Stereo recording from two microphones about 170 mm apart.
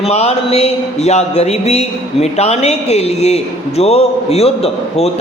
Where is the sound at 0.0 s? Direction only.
40° left (ahead or behind).